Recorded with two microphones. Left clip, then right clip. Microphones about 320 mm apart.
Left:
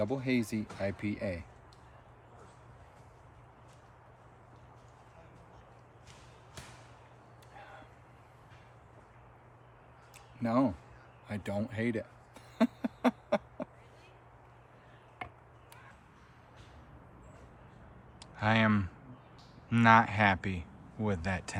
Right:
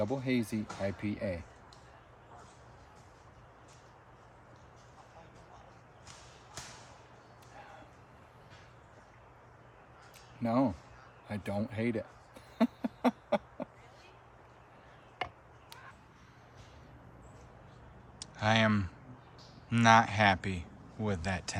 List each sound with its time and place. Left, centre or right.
0.0 s speech: centre
6.6 s a sound: right
10.4 s speech: centre
11.3 s a sound: centre
15.2 s chop: centre
18.2 s speech: centre